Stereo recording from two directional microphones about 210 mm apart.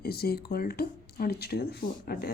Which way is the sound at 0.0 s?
50° left (ahead or behind).